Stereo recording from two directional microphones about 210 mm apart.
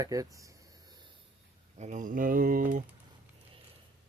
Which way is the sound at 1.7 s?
35° right (ahead or behind).